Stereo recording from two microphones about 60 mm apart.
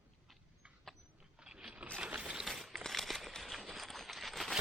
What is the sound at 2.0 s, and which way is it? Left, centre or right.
Mechanisms, centre.